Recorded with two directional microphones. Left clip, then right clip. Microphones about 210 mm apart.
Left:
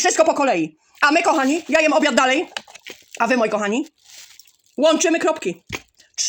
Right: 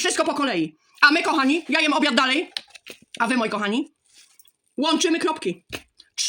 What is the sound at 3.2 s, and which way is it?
Speech, 5° right (ahead or behind).